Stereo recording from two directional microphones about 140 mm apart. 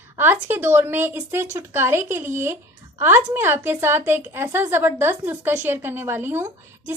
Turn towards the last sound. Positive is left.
turn(degrees=-15)  # may be behind; listen again after turning